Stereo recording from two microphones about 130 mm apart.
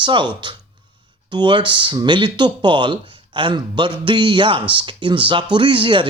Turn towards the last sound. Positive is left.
turn(degrees=-40)  # may be behind; listen again after turning